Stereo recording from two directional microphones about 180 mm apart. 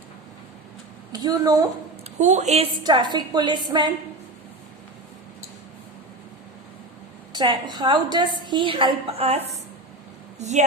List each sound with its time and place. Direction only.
1.1 s a woman's voice: 20° right (ahead or behind)
2.1 s speech: 40° right (ahead or behind)
2.8 s a woman's voice: 25° right (ahead or behind)
7.3 s a woman's voice: 25° right (ahead or behind); by 10.7 s 40° right (ahead or behind)